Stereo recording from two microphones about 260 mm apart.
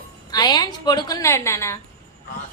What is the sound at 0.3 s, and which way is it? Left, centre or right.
A woman's voice, centre.